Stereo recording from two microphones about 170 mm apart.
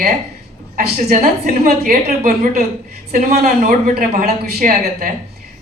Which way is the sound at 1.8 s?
60° right (ahead or behind).